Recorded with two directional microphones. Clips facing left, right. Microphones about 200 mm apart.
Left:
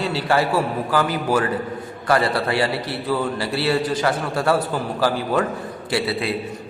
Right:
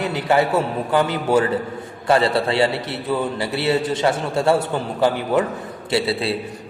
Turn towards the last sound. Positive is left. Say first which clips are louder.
# right 2 dB
turn(degrees=-25)  # may be behind; listen again after turning